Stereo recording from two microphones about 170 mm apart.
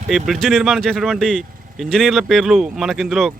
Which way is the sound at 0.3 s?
Centre (ahead or behind).